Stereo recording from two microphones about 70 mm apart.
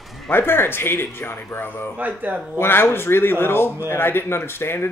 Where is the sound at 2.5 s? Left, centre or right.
Left.